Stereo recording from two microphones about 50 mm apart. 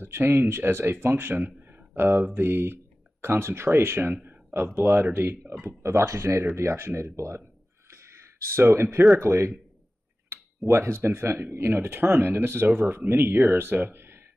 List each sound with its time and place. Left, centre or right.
0.0 s speech: right
1.4 s speech: right
4.1 s a sound: right
4.7 s speech: right
5.1 s speech: right
6.5 s speech: right
7.2 s speech: right
7.9 s a sound: right
9.1 s speech: right
10.7 s speech: right
11.0 s speech: right